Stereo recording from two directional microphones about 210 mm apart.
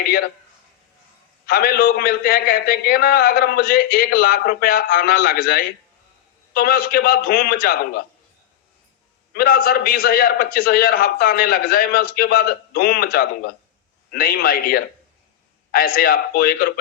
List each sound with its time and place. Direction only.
1.5 s a man's voice: 45° left (ahead or behind)
9.3 s a man's voice: 45° left (ahead or behind)